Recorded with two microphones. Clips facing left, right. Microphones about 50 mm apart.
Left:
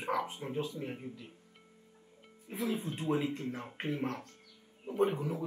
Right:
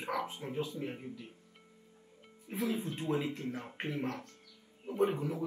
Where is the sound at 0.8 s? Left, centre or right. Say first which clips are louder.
Even; right.